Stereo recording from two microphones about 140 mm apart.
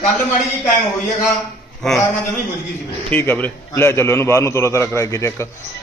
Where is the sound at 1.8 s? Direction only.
5° left (ahead or behind).